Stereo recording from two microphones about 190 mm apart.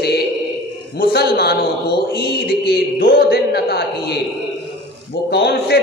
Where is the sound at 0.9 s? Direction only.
55° left (ahead or behind).